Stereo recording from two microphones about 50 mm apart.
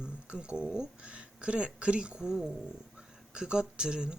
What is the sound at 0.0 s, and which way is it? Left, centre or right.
Speech, right.